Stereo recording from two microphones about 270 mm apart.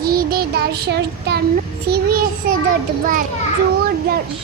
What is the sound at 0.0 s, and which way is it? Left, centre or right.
Child singing, right.